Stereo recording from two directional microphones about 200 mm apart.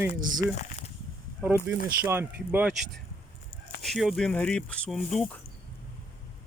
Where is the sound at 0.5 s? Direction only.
35° left (ahead or behind).